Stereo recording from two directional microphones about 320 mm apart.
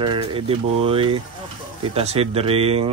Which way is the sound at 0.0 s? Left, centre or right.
Centre.